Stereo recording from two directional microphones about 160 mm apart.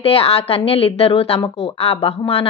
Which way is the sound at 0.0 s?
35° left (ahead or behind).